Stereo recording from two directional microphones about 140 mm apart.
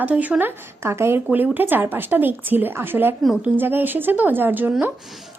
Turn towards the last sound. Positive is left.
turn(degrees=-15)  # may be behind; listen again after turning